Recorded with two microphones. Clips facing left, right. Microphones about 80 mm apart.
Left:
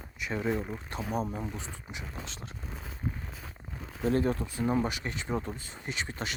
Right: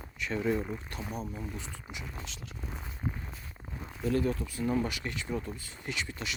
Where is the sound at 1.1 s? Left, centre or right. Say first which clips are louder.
Left 7 dB; left.